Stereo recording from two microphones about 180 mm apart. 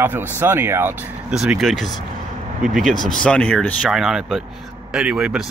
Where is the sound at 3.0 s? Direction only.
5° left (ahead or behind).